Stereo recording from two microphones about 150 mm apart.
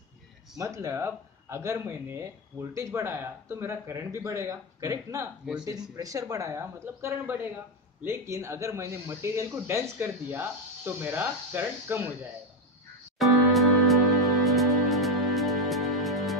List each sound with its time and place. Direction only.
0.6 s speech: 20° right (ahead or behind)
13.2 s music: centre (ahead or behind)